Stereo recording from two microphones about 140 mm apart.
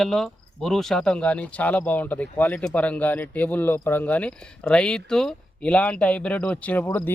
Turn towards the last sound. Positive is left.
turn(degrees=10)  # may be behind; listen again after turning